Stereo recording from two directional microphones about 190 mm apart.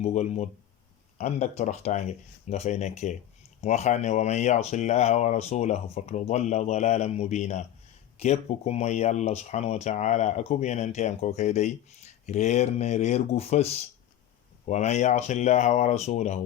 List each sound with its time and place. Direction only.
0.0 s speech: 35° left (ahead or behind)